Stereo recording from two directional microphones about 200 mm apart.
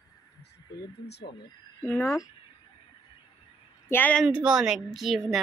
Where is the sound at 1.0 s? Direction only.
55° left (ahead or behind).